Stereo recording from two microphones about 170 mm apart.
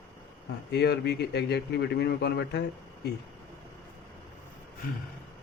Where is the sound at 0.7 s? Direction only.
75° left (ahead or behind).